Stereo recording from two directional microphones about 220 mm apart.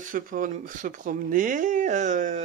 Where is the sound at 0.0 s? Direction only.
35° right (ahead or behind).